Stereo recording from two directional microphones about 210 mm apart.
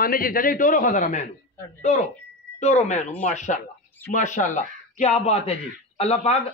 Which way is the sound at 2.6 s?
35° left (ahead or behind).